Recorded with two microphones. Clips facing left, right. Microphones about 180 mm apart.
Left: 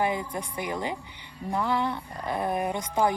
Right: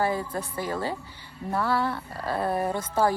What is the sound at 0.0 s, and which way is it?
Speech, 15° left (ahead or behind).